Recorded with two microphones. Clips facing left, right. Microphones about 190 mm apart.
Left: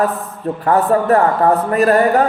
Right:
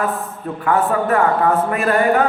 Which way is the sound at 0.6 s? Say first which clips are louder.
Left 3 dB; 35° left (ahead or behind).